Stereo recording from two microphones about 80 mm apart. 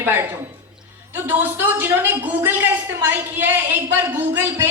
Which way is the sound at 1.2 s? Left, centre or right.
Right.